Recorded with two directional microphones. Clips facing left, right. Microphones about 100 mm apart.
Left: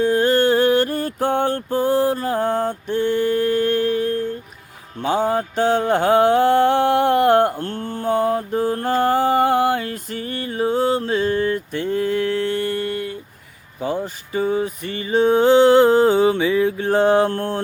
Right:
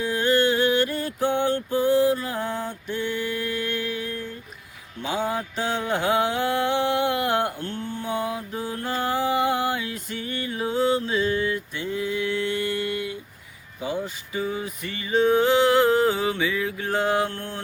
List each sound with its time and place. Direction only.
0.0 s mantra: 40° left (ahead or behind)
2.8 s a sound: 35° left (ahead or behind)
4.9 s mantra: 45° left (ahead or behind)
13.7 s music: 45° left (ahead or behind)